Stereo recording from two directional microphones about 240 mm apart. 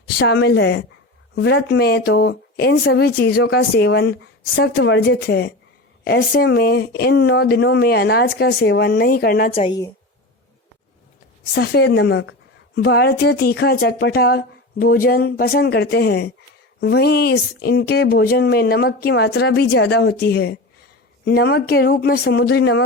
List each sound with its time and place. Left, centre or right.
0.2 s speech: left
9.6 s a woman's voice: centre
11.5 s speech: left